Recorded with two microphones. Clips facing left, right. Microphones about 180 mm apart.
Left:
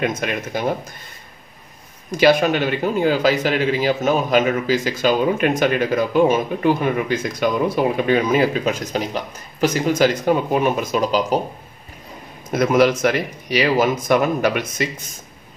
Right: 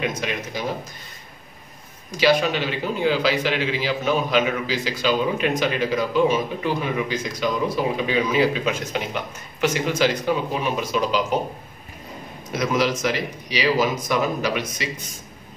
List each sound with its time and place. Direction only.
0.0 s a man's voice: 50° left (ahead or behind)
2.0 s a man's voice: 50° left (ahead or behind)
12.5 s speech: 55° left (ahead or behind)